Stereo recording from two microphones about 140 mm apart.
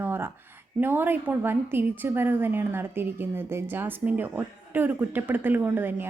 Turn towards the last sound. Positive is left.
turn(degrees=-15)  # may be behind; listen again after turning